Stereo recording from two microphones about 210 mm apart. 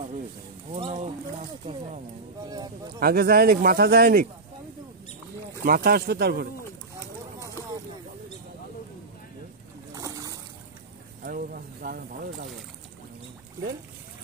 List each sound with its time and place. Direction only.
0.7 s speech: 30° right (ahead or behind)
2.4 s speech: 20° right (ahead or behind)
3.0 s speech: 45° right (ahead or behind)
5.7 s speech: 45° right (ahead or behind)
9.9 s boat: 15° right (ahead or behind)
11.2 s speech: 45° right (ahead or behind)